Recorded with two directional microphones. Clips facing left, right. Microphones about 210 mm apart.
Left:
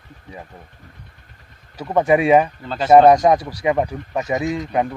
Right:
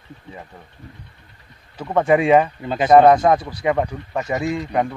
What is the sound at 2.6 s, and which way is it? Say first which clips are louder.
Speech: right 3 dB; 15° right (ahead or behind).